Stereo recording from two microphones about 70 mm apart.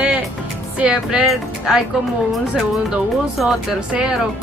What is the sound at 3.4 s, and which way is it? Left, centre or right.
Speech, centre.